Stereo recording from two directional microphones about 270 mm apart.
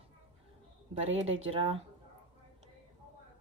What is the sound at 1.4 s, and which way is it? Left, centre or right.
Speech, right.